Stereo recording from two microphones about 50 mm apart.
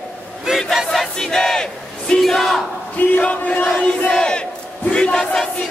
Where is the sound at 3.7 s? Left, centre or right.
Centre.